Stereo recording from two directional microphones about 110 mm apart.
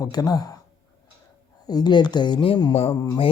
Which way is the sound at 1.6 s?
40° left (ahead or behind).